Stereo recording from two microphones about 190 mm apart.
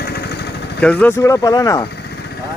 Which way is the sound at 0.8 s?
10° left (ahead or behind).